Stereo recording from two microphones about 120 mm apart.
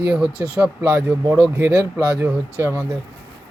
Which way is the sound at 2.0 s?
15° right (ahead or behind).